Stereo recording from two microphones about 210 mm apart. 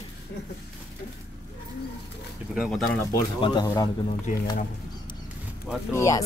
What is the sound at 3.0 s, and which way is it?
Speech, 20° left (ahead or behind).